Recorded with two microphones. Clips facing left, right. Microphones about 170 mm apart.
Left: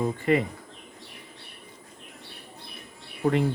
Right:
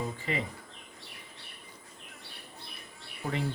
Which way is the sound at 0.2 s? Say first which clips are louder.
Left 11 dB; 55° left (ahead or behind).